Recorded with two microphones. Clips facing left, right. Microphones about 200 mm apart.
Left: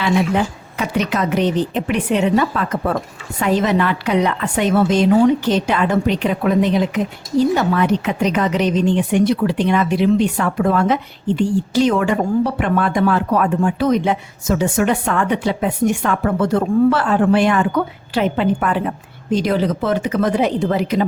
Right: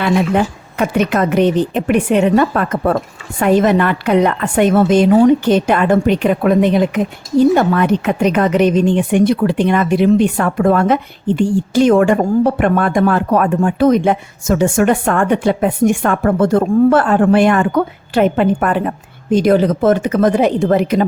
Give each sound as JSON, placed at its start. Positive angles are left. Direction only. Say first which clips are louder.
{"t": 0.0, "sound": "a woman's voice", "louder": "right 3 dB", "side_deg": -55}